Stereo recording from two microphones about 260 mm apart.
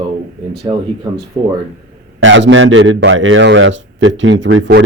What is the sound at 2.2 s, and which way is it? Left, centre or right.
Speech, right.